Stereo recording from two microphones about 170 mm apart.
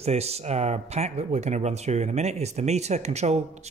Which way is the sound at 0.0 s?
35° right (ahead or behind).